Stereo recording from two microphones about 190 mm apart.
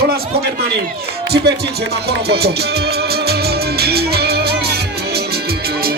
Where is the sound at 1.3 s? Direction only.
60° right (ahead or behind).